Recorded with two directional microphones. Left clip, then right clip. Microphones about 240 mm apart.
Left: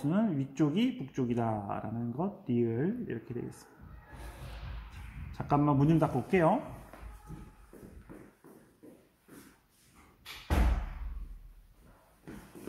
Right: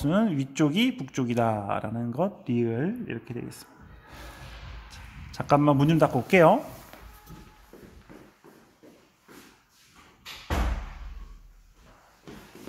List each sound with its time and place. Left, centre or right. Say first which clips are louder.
0.0 s speech: right 6 dB; right
5.3 s speech: right 7 dB; right